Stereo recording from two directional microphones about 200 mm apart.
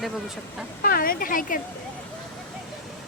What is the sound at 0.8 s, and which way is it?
Speech, 45° left (ahead or behind).